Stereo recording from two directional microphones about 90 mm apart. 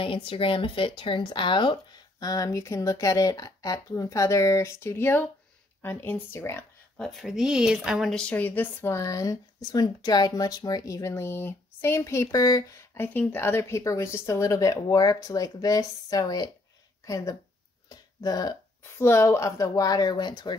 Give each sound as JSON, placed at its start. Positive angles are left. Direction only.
{"t": 0.0, "sound": "speech", "side_deg": 75}
{"t": 7.1, "sound": "speech", "side_deg": 0}
{"t": 8.1, "sound": "speech", "side_deg": 10}
{"t": 8.9, "sound": "speech", "side_deg": 35}
{"t": 12.9, "sound": "speech", "side_deg": 25}
{"t": 17.8, "sound": "a sound", "side_deg": 45}
{"t": 18.9, "sound": "speech", "side_deg": 30}